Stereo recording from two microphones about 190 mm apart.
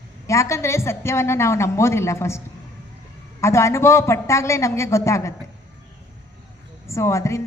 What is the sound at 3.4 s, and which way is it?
A woman's voice, 15° left (ahead or behind).